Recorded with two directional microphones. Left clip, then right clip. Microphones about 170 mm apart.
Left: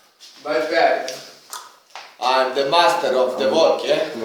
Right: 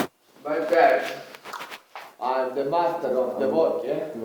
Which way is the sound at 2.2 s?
10° left (ahead or behind).